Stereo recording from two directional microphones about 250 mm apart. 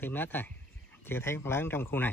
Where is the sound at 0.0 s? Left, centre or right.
Centre.